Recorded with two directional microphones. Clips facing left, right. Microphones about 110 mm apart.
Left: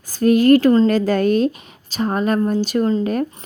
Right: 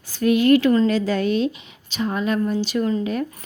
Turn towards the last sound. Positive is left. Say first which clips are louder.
# left 4 dB
turn(degrees=40)  # may be behind; listen again after turning